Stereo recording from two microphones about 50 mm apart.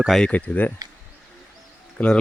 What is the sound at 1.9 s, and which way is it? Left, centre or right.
Speech, left.